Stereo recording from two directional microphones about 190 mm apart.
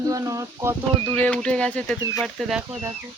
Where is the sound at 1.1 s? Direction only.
5° left (ahead or behind).